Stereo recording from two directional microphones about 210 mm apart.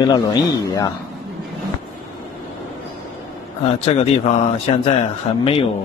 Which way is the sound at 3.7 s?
30° left (ahead or behind).